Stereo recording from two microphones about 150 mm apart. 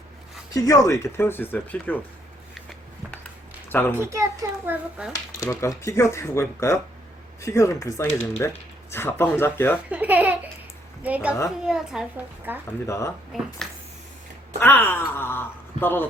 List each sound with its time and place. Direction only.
0.5 s speech: 25° left (ahead or behind)
3.7 s a woman's voice: 15° left (ahead or behind)
3.9 s a child's voice: 20° right (ahead or behind)
5.0 s a woman's voice: 5° right (ahead or behind)
5.4 s speech: 20° left (ahead or behind)
9.9 s a sound: 10° right (ahead or behind)
11.0 s a woman's voice: 10° right (ahead or behind)
12.8 s speech: 20° left (ahead or behind)
13.6 s a sound: centre (ahead or behind)
14.6 s speech: 15° left (ahead or behind)